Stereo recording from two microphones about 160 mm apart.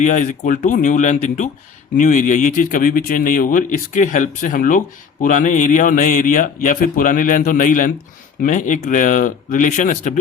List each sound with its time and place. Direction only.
0.0 s speech: 50° left (ahead or behind)